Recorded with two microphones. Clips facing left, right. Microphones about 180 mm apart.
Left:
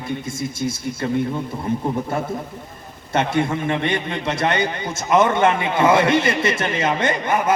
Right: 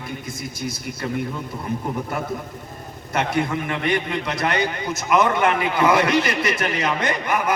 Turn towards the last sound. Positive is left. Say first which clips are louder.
# left 3 dB
turn(degrees=25)  # may be behind; listen again after turning